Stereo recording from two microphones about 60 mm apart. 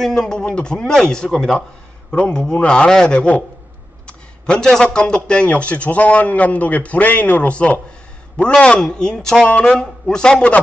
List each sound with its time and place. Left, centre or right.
0.0 s a man's voice: centre
4.5 s a man's voice: centre
9.5 s a man's voice: left